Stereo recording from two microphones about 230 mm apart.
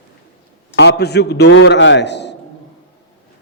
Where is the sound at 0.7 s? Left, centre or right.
Left.